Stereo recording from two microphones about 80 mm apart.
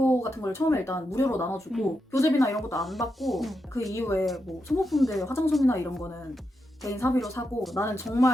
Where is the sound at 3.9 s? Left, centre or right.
Left.